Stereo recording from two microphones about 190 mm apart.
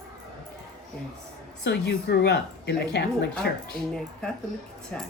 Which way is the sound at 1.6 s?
60° left (ahead or behind).